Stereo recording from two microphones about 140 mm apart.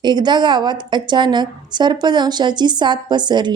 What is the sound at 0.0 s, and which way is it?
A woman's voice, 30° right (ahead or behind).